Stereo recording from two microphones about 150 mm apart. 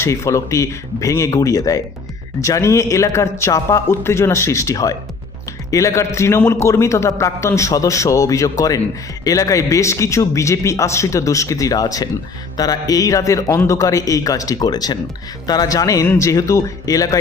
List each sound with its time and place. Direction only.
0.0 s a man's voice: 20° left (ahead or behind)